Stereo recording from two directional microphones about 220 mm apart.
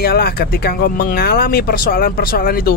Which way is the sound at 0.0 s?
45° left (ahead or behind).